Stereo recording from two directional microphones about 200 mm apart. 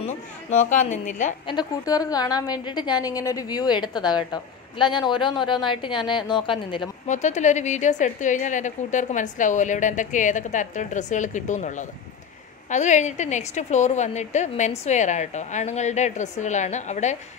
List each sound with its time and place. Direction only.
0.5 s a woman's voice: 35° left (ahead or behind)
1.5 s a woman's voice: 20° left (ahead or behind)
7.1 s a woman's voice: 35° left (ahead or behind)